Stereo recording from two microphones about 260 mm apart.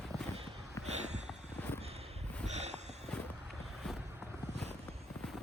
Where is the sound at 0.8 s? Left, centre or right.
Right.